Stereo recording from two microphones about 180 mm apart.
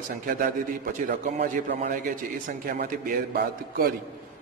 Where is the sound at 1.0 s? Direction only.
50° right (ahead or behind).